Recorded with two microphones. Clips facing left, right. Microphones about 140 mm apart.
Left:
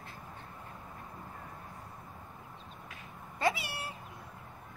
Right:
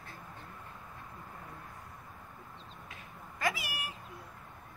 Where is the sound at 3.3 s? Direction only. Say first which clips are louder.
Left 3 dB; 30° left (ahead or behind).